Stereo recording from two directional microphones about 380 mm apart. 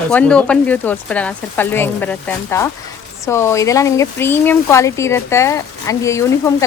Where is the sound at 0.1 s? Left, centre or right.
Centre.